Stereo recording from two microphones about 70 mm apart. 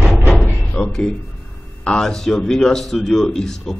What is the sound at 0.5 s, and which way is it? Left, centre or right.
A man's voice, centre.